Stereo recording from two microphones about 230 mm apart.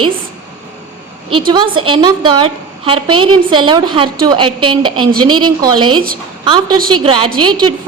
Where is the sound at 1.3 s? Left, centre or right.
Right.